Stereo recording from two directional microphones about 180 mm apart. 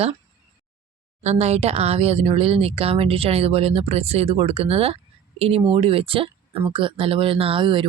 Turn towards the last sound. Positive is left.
turn(degrees=-30)  # may be behind; listen again after turning